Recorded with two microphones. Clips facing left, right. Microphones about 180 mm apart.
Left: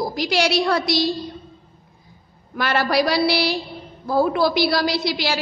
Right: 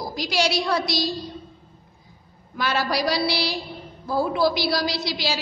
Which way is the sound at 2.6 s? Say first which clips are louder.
Left 4 dB; 60° left (ahead or behind).